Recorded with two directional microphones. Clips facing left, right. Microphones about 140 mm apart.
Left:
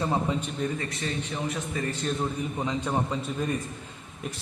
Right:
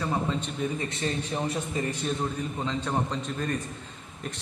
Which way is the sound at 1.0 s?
35° right (ahead or behind).